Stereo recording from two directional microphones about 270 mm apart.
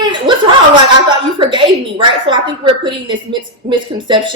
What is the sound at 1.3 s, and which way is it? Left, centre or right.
A woman's voice, centre.